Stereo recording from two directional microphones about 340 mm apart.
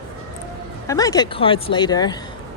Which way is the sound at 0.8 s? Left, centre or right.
Centre.